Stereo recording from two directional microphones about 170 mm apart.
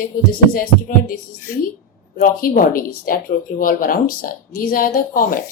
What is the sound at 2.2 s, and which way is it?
Speech, 55° left (ahead or behind).